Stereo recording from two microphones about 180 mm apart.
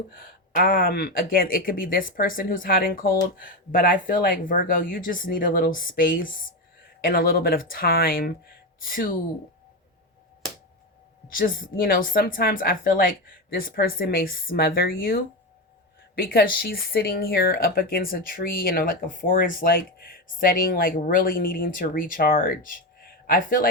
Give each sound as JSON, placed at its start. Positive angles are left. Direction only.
{"t": 0.1, "sound": "speech", "side_deg": 50}
{"t": 11.3, "sound": "speech", "side_deg": 50}